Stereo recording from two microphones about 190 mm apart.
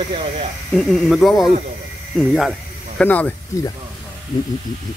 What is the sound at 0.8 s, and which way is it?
Speech, centre (ahead or behind).